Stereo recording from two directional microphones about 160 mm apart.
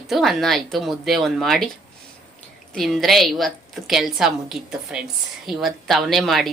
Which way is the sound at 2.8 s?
Centre (ahead or behind).